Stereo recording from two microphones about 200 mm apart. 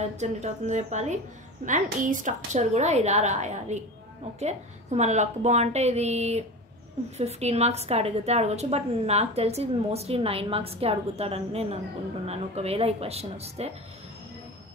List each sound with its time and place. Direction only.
0.0 s a woman's voice: 35° right (ahead or behind)